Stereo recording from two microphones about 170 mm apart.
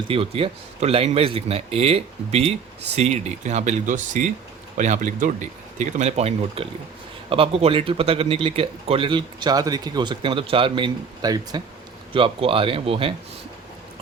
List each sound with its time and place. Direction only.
0.1 s a man's voice: 35° right (ahead or behind)